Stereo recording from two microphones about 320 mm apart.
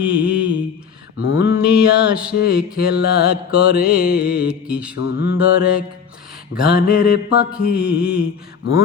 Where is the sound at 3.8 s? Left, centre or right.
Centre.